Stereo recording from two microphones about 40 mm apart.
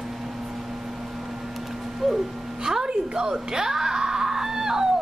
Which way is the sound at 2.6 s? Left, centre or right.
Centre.